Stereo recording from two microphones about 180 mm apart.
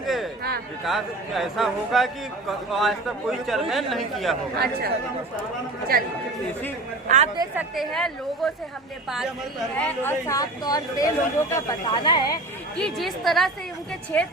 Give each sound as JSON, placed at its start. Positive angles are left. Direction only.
{"t": 0.0, "sound": "a sound", "side_deg": 0}
{"t": 0.9, "sound": "a man's voice", "side_deg": 0}
{"t": 4.5, "sound": "speech", "side_deg": -60}
{"t": 5.9, "sound": "speech", "side_deg": -55}
{"t": 7.5, "sound": "a man's voice", "side_deg": 0}
{"t": 9.7, "sound": "speech", "side_deg": 10}
{"t": 12.7, "sound": "a man's voice", "side_deg": 0}